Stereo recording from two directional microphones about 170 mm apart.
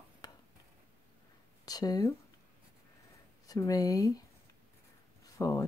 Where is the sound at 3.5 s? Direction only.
20° left (ahead or behind).